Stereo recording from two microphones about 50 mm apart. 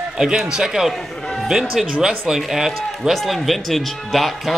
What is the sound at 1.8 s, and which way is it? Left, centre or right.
Speech, right.